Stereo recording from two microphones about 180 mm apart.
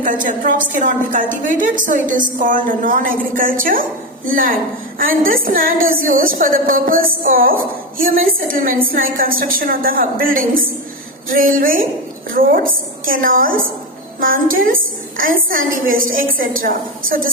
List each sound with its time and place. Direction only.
0.0 s a woman's voice: 50° right (ahead or behind)